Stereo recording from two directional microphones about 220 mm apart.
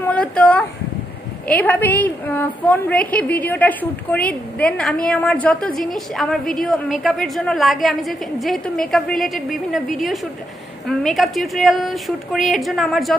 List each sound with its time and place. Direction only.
0.0 s a woman's voice: 5° left (ahead or behind)